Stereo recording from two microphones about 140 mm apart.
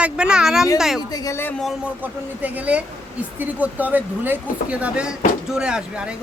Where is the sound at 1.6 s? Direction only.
Centre (ahead or behind).